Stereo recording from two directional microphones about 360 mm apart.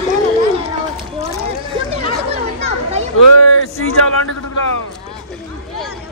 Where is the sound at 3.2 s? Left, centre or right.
Left.